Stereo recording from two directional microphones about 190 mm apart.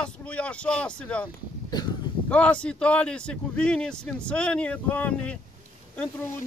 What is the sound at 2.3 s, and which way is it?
A man's voice, 5° left (ahead or behind).